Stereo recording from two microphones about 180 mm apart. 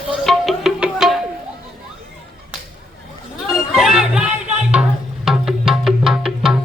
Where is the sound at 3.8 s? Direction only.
5° right (ahead or behind).